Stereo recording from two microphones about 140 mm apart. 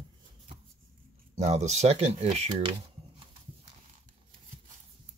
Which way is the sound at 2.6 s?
40° right (ahead or behind).